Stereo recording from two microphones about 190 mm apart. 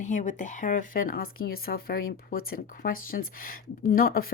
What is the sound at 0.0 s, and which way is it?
Speech, 40° left (ahead or behind).